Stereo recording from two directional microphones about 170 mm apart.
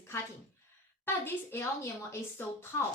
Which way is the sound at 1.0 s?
15° left (ahead or behind).